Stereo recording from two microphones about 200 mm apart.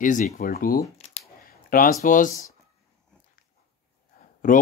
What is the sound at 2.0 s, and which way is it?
Speech, 40° left (ahead or behind).